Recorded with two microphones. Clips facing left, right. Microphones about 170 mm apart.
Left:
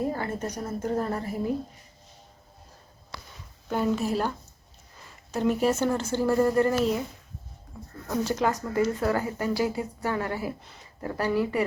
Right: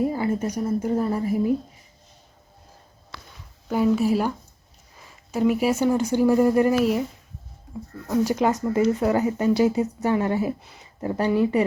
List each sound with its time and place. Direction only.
0.0 s speech: 10° right (ahead or behind)
3.7 s speech: 5° right (ahead or behind)
8.1 s speech: 10° right (ahead or behind)